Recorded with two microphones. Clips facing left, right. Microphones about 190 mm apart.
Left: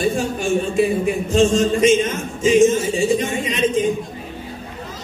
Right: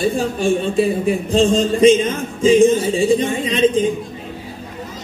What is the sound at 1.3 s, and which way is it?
A man's voice, 35° right (ahead or behind).